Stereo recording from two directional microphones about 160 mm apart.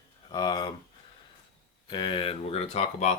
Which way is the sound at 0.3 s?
25° left (ahead or behind).